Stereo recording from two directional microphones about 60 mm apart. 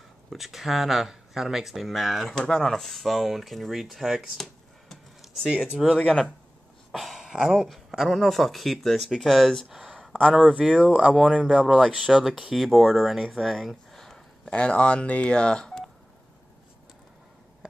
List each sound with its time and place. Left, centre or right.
0.3 s speech: centre
4.8 s a sound: centre
5.5 s speech: centre
5.9 s speech: centre
6.9 s a sound: centre
7.6 s speech: centre
10.3 s speech: centre
14.5 s speech: centre